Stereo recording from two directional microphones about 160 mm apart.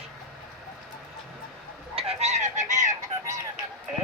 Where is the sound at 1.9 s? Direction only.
40° right (ahead or behind).